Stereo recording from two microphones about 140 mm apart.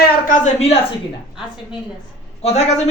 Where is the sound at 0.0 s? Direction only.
85° left.